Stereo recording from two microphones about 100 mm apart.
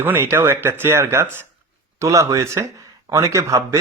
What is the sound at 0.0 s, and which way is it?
A man's voice, 25° right (ahead or behind).